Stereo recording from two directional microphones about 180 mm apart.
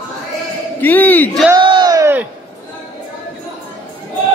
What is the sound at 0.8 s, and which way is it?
Speech, 10° left (ahead or behind).